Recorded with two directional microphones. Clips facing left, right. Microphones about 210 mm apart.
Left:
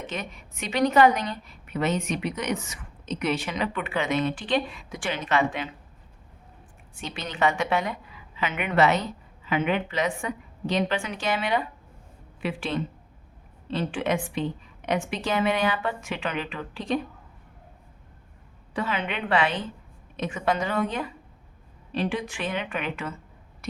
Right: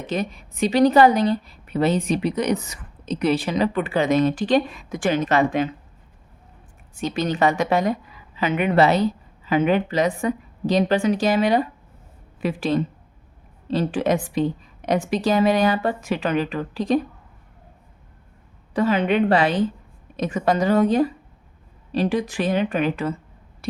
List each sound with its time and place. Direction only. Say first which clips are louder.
0.1 s a woman's voice: right 9 dB; 35° right (ahead or behind)
6.9 s a woman's voice: right 12 dB; 40° right (ahead or behind)
18.7 s a woman's voice: right 10 dB; 40° right (ahead or behind)